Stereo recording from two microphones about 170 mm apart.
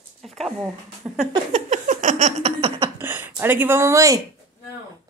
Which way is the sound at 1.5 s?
45° right (ahead or behind).